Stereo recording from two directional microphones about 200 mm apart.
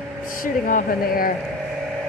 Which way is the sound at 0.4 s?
45° left (ahead or behind).